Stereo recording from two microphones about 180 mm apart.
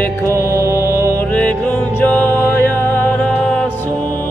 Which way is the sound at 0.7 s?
15° left (ahead or behind).